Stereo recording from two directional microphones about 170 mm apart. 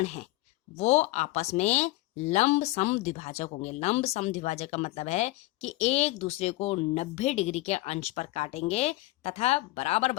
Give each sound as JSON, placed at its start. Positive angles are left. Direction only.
{"t": 0.0, "sound": "speech", "side_deg": 40}